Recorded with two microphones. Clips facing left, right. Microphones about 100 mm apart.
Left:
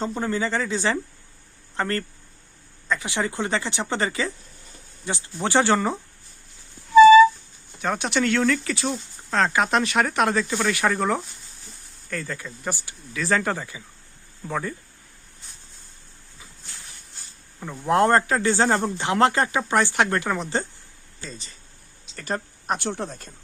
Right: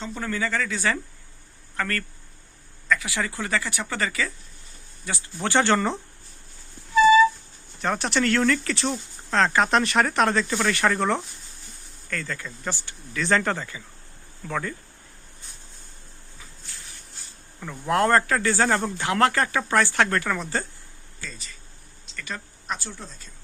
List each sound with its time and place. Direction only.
0.2 s speech: 25° left (ahead or behind)
7.8 s speech: centre (ahead or behind)
12.8 s speech: 5° left (ahead or behind)
17.6 s speech: 20° left (ahead or behind)
21.2 s speech: 30° left (ahead or behind)
22.8 s speech: 65° left (ahead or behind)